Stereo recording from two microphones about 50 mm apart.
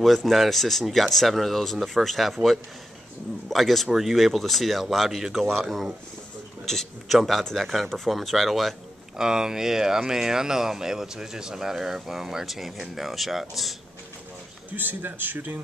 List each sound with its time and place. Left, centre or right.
0.0 s a man's voice: centre
9.1 s speech: centre
14.8 s a man's voice: right